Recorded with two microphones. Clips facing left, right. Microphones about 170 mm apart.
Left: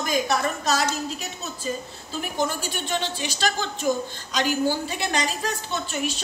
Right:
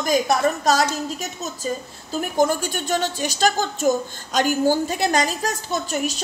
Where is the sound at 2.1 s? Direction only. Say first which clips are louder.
Right 7 dB; 45° right (ahead or behind).